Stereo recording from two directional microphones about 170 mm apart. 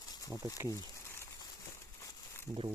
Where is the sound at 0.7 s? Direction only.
15° left (ahead or behind).